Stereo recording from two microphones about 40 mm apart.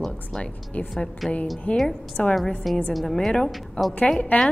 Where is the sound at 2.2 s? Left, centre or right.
Left.